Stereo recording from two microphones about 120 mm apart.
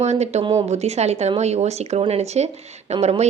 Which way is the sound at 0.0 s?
70° right (ahead or behind).